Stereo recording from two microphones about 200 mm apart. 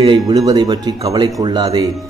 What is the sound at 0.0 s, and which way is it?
A man's voice, 20° right (ahead or behind).